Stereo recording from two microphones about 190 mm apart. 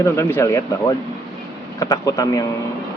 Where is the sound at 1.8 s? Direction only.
20° left (ahead or behind).